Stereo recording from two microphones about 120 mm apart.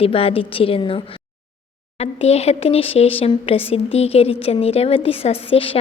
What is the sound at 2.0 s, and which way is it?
A woman's voice, 60° left (ahead or behind).